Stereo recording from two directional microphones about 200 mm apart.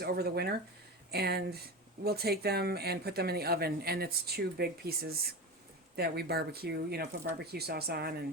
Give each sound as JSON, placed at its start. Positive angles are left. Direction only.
{"t": 0.0, "sound": "speech", "side_deg": -50}
{"t": 6.0, "sound": "speech", "side_deg": -55}